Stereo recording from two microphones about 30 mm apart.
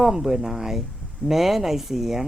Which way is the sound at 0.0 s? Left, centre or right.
Centre.